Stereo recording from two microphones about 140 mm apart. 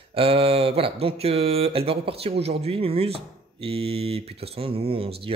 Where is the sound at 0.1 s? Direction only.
40° right (ahead or behind).